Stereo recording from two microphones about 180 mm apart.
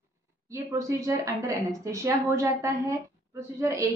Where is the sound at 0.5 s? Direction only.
15° right (ahead or behind).